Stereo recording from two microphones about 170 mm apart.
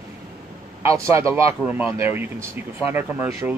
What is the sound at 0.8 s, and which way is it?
Speech, 15° right (ahead or behind).